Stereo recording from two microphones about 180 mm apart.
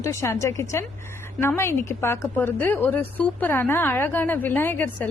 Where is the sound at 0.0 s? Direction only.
15° left (ahead or behind).